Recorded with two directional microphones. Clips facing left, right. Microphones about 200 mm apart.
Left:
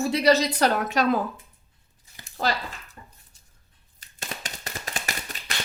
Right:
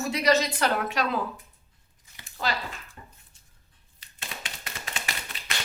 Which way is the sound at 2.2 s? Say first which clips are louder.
Left 4 dB; 40° left (ahead or behind).